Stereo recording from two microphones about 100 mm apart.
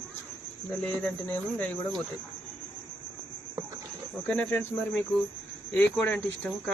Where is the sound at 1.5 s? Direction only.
5° left (ahead or behind).